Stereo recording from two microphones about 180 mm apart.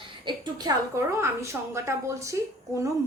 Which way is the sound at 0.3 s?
20° right (ahead or behind).